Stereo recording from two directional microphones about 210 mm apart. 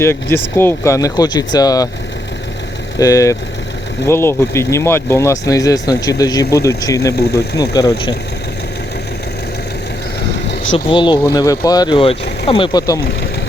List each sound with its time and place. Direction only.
0.0 s speech: 10° left (ahead or behind)
3.0 s speech: 15° left (ahead or behind)
7.2 s speech: 50° left (ahead or behind)
7.6 s speech: 15° left (ahead or behind)
10.8 s speech: 20° left (ahead or behind)